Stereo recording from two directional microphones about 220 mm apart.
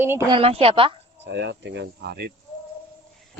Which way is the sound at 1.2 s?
50° right (ahead or behind).